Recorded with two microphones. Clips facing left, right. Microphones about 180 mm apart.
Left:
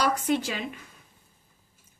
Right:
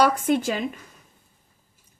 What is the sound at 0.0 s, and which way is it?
Speech, 55° right (ahead or behind).